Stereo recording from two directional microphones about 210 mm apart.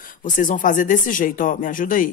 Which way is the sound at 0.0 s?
40° left (ahead or behind).